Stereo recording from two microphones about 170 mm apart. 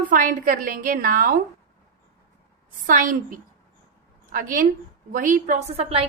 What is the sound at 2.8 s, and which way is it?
A woman's voice, 50° right (ahead or behind).